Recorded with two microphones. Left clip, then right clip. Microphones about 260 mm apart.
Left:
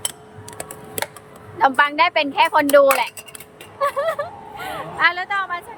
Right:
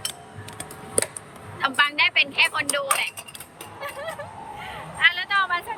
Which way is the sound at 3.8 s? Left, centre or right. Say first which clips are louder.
Left 13 dB; left.